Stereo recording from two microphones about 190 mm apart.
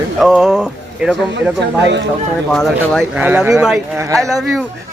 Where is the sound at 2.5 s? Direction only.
Centre (ahead or behind).